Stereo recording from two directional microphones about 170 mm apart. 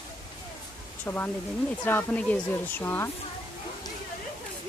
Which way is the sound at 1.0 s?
10° left (ahead or behind).